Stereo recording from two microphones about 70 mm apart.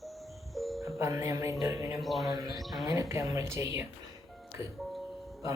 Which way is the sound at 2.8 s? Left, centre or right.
Right.